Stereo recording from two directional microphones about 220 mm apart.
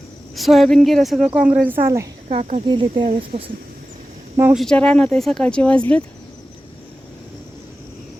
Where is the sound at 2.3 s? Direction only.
30° right (ahead or behind).